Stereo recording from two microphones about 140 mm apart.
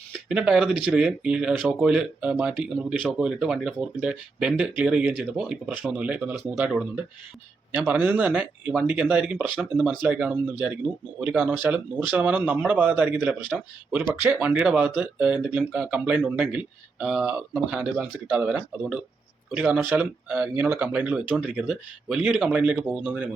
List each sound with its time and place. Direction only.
0.3 s speech: 5° right (ahead or behind)
13.5 s speech: 5° right (ahead or behind)
13.9 s speech: 15° right (ahead or behind)